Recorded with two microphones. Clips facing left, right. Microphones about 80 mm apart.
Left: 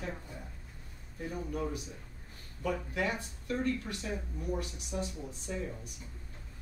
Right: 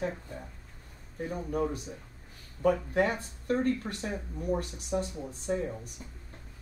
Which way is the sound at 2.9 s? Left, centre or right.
Right.